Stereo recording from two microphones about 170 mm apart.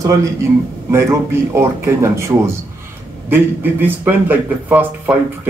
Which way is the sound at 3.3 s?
10° right (ahead or behind).